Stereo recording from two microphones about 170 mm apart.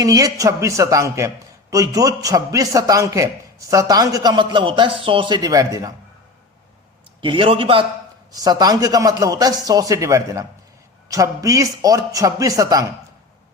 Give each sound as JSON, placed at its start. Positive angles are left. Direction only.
{"t": 0.0, "sound": "a man's voice", "side_deg": -20}
{"t": 7.2, "sound": "a man's voice", "side_deg": -30}
{"t": 8.3, "sound": "a man's voice", "side_deg": -20}